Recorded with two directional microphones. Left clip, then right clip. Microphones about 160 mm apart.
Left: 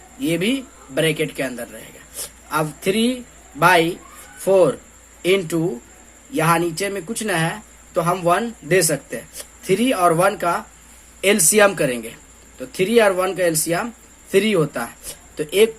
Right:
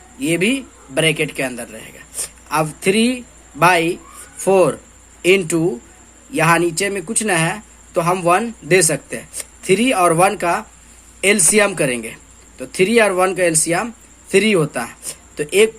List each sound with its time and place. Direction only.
0.2 s speech: 20° right (ahead or behind)